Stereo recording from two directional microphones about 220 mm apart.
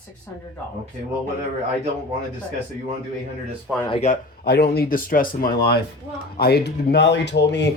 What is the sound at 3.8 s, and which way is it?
Speech, 25° left (ahead or behind).